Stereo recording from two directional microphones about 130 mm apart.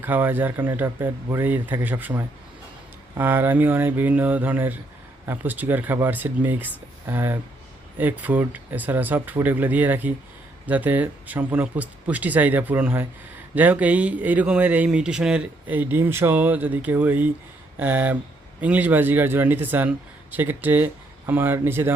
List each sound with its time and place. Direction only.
0.0 s speech: 15° right (ahead or behind)